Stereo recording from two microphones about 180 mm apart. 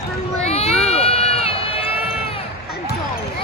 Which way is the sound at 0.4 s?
35° left (ahead or behind).